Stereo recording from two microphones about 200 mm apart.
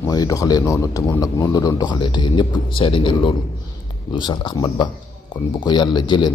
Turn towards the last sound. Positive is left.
turn(degrees=20)  # may be behind; listen again after turning